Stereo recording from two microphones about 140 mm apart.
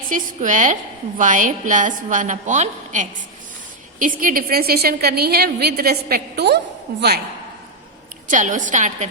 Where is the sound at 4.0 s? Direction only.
75° right (ahead or behind); by 6.2 s 90° right.